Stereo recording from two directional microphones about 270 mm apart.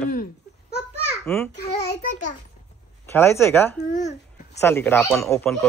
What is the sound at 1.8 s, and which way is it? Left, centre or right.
Speech, left.